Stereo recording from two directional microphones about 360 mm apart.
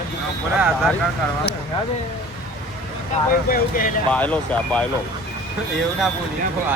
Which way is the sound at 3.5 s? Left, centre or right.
Left.